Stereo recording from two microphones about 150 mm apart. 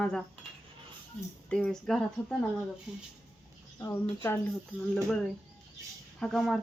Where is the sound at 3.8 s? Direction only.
15° left (ahead or behind).